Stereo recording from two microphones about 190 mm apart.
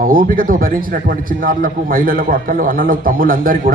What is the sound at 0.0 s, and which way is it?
A man's voice, 50° right (ahead or behind).